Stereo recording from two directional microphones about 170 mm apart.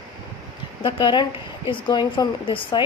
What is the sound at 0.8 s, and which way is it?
A woman's voice, 25° left (ahead or behind).